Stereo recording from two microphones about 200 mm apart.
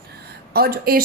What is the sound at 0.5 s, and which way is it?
Speech, 50° right (ahead or behind).